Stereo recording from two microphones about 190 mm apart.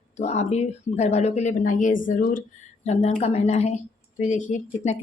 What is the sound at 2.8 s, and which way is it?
Speech, 35° left (ahead or behind).